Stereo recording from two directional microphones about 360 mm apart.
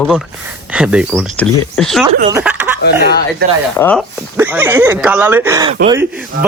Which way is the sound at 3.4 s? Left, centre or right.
Right.